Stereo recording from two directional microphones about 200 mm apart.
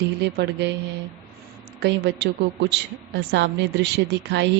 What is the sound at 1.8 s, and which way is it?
A woman's voice, 55° right (ahead or behind).